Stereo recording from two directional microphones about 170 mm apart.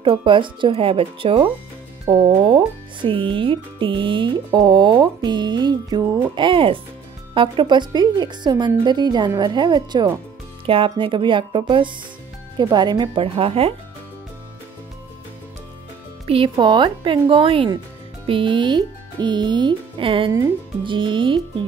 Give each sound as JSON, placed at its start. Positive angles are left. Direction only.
{"t": 0.0, "sound": "a woman's voice", "side_deg": -30}
{"t": 16.3, "sound": "a woman's voice", "side_deg": -30}